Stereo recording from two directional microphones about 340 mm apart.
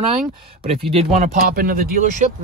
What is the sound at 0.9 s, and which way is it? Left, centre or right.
Speech, centre.